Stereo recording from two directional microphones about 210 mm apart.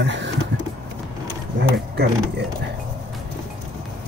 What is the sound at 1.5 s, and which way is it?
Speech, 50° right (ahead or behind).